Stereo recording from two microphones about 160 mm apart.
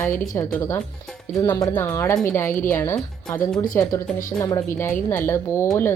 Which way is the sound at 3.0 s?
5° left (ahead or behind).